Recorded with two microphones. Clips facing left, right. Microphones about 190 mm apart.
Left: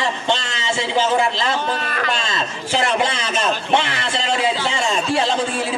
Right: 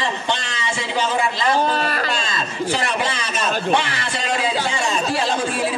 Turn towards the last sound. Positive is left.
turn(degrees=25)  # may be behind; listen again after turning